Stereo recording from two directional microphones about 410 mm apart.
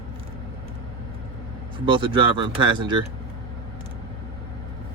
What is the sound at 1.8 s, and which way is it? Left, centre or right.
Speech, centre.